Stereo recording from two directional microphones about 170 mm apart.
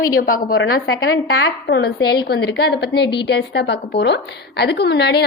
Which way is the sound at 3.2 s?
90° left.